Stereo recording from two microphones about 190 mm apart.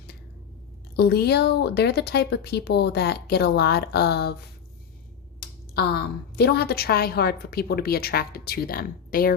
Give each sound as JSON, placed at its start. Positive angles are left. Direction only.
{"t": 0.9, "sound": "a woman's voice", "side_deg": 60}